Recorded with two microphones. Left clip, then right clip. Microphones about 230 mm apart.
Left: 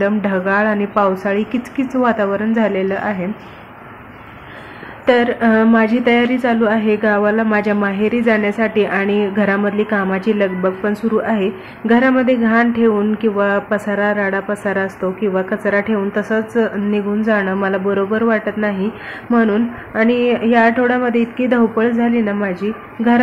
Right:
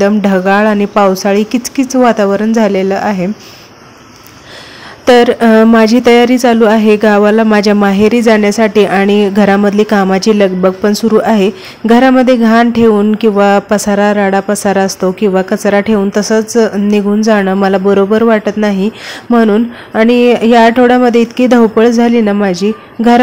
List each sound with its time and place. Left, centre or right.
0.0 s a woman's voice: right
5.0 s a woman's voice: right